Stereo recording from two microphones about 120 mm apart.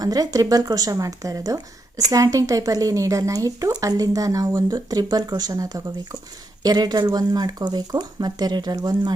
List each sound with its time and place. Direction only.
0.0 s speech: 30° right (ahead or behind)